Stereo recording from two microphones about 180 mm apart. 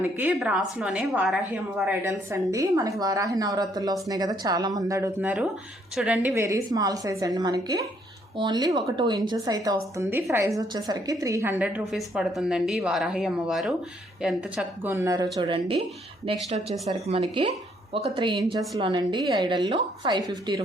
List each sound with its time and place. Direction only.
0.2 s a woman's voice: 5° right (ahead or behind)
14.9 s a woman's voice: 20° right (ahead or behind)